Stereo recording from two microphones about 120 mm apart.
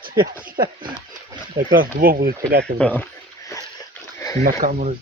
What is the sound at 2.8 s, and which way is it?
Speech, 15° left (ahead or behind).